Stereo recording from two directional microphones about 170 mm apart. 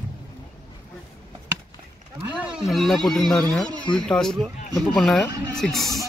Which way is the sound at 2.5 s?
Centre (ahead or behind).